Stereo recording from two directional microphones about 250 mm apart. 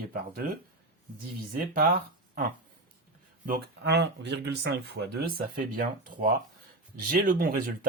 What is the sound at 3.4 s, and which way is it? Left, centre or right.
Speech, right.